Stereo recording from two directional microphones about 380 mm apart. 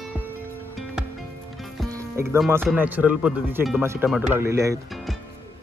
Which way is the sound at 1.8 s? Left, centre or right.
Centre.